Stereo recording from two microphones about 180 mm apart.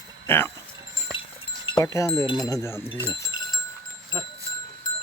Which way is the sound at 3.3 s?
25° left (ahead or behind).